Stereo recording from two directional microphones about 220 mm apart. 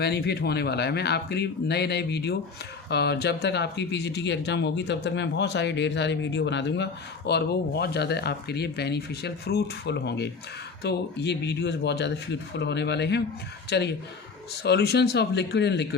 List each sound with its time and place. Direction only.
0.0 s speech: 50° left (ahead or behind)